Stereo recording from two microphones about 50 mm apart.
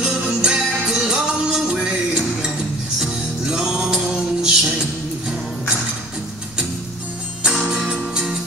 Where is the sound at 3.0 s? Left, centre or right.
Centre.